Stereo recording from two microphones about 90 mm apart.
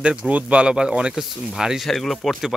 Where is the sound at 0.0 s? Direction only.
10° right (ahead or behind).